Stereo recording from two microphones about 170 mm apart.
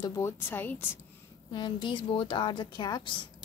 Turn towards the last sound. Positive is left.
turn(degrees=25)  # may be behind; listen again after turning